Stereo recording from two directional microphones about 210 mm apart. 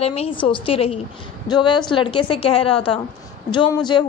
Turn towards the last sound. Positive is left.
turn(degrees=20)  # may be behind; listen again after turning